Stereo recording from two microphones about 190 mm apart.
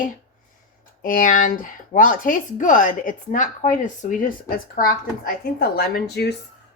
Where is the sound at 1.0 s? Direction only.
45° left (ahead or behind).